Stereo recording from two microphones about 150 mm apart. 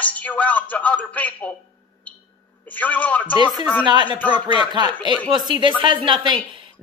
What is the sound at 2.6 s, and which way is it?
Speech, 10° left (ahead or behind).